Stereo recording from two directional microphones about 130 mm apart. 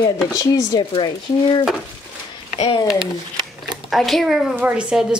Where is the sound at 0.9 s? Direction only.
40° left (ahead or behind).